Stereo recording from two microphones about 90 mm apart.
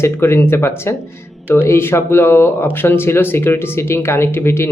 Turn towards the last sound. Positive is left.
turn(degrees=25)  # may be behind; listen again after turning